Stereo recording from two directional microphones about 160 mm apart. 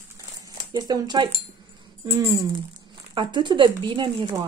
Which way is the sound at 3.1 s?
30° right (ahead or behind).